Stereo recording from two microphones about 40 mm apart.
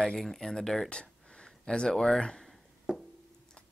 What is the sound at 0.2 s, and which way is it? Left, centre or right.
Speech, centre.